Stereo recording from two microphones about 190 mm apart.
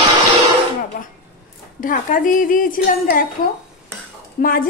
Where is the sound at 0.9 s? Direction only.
45° left (ahead or behind).